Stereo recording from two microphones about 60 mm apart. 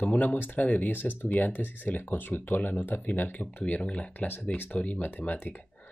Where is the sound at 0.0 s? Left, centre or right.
Left.